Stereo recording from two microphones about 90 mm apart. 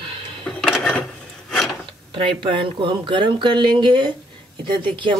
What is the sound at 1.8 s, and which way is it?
Speech, 75° right (ahead or behind).